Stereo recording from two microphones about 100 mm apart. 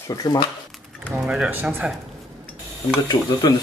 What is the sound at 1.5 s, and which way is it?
Speech, 20° right (ahead or behind).